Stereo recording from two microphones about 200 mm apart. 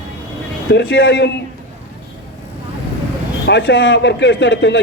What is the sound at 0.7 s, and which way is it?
Speech, 50° left (ahead or behind).